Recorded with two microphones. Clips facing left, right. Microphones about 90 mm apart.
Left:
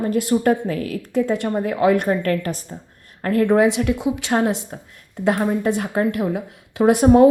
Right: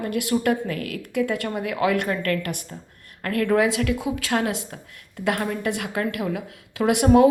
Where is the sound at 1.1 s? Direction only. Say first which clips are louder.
Left 4 dB; 25° left (ahead or behind).